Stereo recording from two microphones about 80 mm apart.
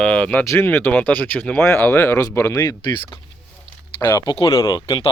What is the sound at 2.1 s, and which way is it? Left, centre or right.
Speech, left.